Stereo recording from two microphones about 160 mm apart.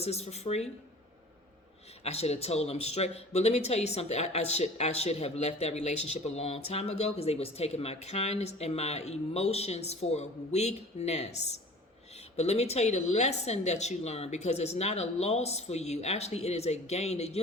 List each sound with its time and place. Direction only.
0.0 s speech: 40° left (ahead or behind)
2.0 s a woman's voice: 40° left (ahead or behind)